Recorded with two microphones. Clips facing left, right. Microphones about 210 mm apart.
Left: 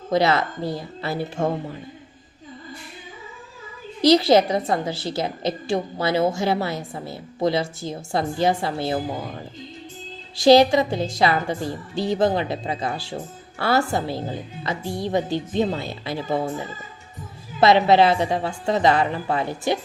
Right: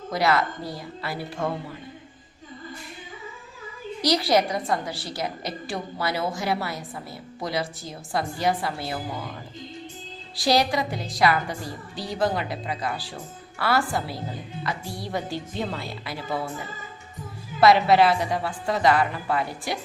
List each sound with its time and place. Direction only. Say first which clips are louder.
0.1 s a woman's voice: left 4 dB; 25° left (ahead or behind)
4.0 s a woman's voice: left 6 dB; 25° left (ahead or behind)
10.3 s a woman's voice: left 8 dB; 25° left (ahead or behind)
17.6 s a woman's voice: left 2 dB; 25° left (ahead or behind)